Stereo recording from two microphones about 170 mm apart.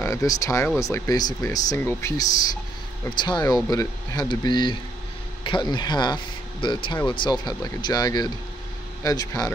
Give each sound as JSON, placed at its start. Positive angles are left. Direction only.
{"t": 0.0, "sound": "speech", "side_deg": 20}